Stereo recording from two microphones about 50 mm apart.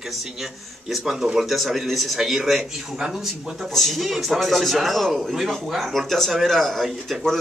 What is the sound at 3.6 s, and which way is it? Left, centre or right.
Speech, centre.